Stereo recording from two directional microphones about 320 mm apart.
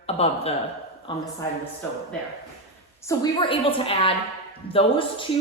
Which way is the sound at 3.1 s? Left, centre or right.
Centre.